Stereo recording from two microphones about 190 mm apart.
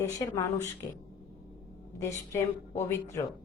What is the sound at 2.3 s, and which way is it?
Speech, 15° left (ahead or behind).